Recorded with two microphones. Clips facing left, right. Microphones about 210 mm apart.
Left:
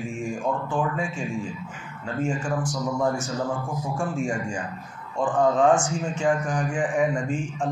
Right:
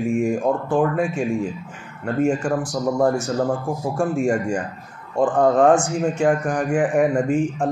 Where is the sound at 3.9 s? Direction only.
60° right (ahead or behind).